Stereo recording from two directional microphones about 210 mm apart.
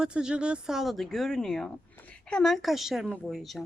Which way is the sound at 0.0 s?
5° right (ahead or behind).